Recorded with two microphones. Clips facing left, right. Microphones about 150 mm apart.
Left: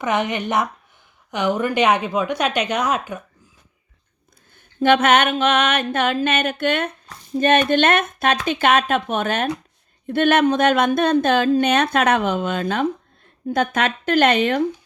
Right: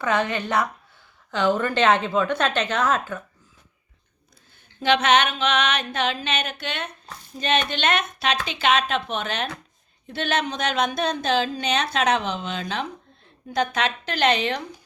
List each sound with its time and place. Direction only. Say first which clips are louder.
0.0 s a woman's voice: left 2 dB; 20° left (ahead or behind)
4.8 s speech: left 4 dB; 50° left (ahead or behind)